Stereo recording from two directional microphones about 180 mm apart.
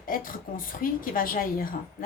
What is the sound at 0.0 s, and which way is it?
A woman's voice, 50° left (ahead or behind).